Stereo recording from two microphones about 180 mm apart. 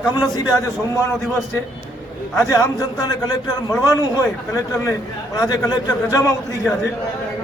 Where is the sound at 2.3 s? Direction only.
15° left (ahead or behind).